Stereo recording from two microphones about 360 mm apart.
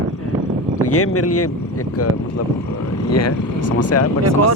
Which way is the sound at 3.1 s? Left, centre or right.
Left.